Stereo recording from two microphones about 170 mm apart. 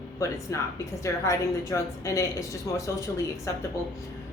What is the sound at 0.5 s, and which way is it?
A woman's voice, 20° left (ahead or behind).